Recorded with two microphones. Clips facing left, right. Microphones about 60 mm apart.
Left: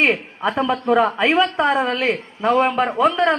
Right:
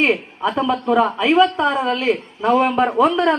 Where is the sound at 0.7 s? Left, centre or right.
Centre.